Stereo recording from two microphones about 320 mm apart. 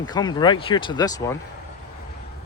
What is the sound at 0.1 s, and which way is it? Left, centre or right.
Speech, centre.